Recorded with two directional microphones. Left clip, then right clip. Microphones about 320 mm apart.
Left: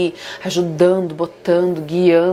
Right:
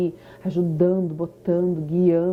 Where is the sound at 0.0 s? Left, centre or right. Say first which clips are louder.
Left 6 dB; centre.